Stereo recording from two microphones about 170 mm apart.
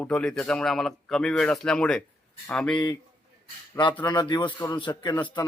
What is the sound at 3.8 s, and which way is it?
A man's voice, 15° left (ahead or behind).